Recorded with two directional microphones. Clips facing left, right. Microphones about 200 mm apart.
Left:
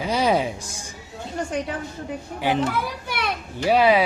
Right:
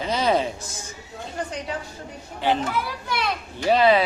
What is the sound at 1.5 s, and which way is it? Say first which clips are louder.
Speech: left 5 dB; 50° left (ahead or behind).